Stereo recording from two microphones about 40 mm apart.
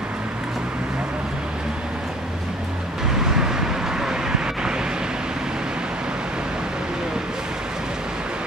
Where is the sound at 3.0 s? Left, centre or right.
Centre.